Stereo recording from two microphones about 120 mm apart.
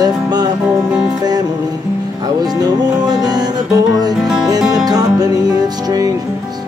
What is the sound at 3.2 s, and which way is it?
Music, 35° right (ahead or behind).